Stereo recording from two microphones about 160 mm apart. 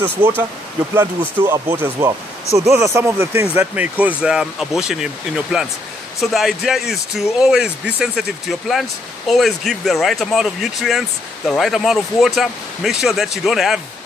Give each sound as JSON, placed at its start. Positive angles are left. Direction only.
{"t": 0.9, "sound": "speech", "side_deg": -15}